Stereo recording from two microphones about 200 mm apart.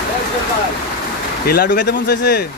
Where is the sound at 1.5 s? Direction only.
55° left (ahead or behind).